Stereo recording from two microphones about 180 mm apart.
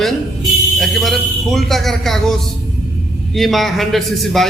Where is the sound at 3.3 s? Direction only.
Centre (ahead or behind).